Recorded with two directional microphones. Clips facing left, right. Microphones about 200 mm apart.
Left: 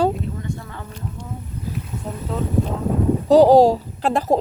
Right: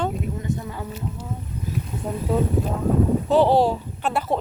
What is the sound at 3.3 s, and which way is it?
A woman's voice, 40° left (ahead or behind).